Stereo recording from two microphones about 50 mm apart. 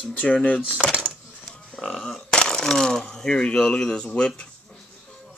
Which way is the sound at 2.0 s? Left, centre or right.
Centre.